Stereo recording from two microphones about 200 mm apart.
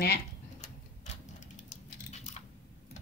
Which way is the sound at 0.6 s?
35° left (ahead or behind).